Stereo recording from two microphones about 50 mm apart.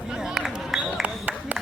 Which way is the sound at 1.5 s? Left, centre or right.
Right.